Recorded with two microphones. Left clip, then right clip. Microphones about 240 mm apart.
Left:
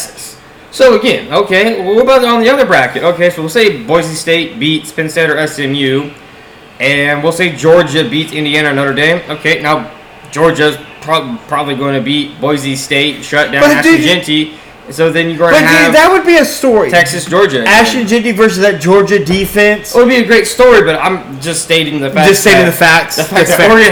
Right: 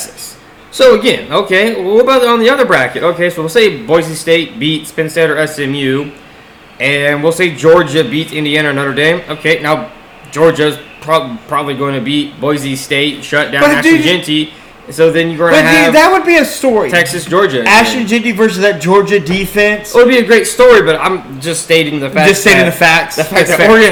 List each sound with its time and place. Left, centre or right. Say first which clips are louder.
0.8 s a man's voice: even; right
16.0 s a man's voice: left 1 dB; left
16.9 s speech: left 2 dB; right
17.6 s a man's voice: left 1 dB; left
19.9 s a man's voice: right 4 dB; right
22.3 s speech: left 1 dB; left
23.1 s a man's voice: left 1 dB; right